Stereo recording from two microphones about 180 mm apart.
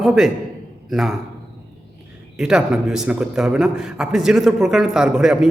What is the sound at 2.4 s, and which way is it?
A man's voice, 5° right (ahead or behind).